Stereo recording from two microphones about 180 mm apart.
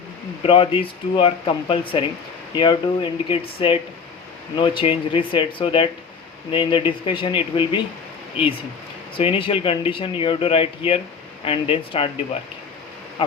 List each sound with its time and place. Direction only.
0.4 s speech: 30° left (ahead or behind)
9.1 s speech: 30° left (ahead or behind)